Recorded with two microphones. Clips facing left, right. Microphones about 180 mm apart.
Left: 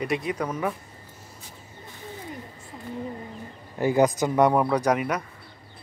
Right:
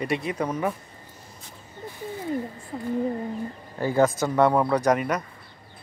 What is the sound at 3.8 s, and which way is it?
Speech, 15° left (ahead or behind).